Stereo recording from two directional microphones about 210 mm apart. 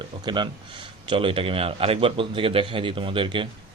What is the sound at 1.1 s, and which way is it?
Speech, 25° right (ahead or behind).